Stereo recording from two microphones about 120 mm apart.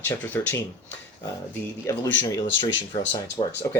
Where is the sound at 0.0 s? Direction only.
15° left (ahead or behind).